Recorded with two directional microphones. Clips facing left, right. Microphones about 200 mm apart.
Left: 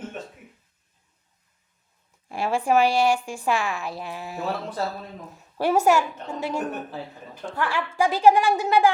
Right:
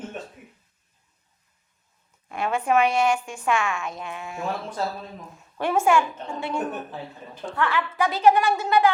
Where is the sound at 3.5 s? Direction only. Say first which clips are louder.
Right 2 dB; 35° left (ahead or behind).